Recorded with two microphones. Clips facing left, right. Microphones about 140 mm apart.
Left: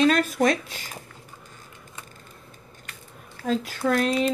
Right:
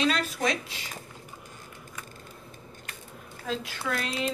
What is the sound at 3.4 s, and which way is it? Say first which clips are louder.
Speech: left 8 dB; 45° left (ahead or behind).